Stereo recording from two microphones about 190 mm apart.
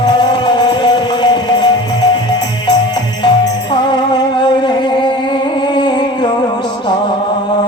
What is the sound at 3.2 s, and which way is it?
Music, 25° left (ahead or behind).